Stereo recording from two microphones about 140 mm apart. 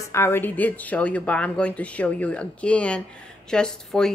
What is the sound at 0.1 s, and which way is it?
Speech, 15° left (ahead or behind).